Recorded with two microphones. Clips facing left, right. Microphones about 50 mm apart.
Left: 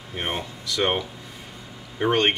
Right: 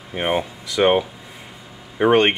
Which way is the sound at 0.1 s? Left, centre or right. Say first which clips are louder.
Right 8 dB; centre.